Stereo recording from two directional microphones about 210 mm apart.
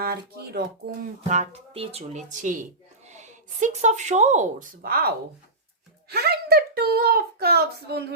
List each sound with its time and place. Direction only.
0.0 s speech: 45° right (ahead or behind)
1.3 s speech: 30° right (ahead or behind); by 8.0 s 50° right (ahead or behind)